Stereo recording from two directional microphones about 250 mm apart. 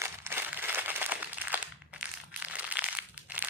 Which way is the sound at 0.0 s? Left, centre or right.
Centre.